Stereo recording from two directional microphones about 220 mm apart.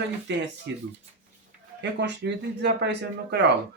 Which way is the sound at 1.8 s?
50° right (ahead or behind).